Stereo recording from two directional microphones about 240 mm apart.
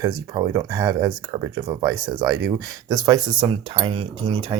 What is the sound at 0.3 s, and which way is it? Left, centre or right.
Speech, centre.